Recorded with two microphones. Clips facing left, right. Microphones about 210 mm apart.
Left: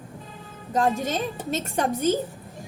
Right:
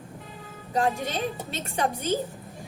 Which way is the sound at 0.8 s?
45° left (ahead or behind).